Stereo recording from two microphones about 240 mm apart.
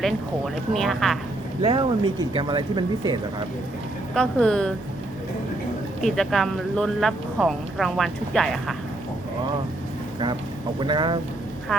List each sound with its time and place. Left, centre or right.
0.0 s speech: centre
1.6 s speech: right
4.1 s speech: centre
6.0 s speech: centre
10.8 s speech: centre
11.7 s speech: centre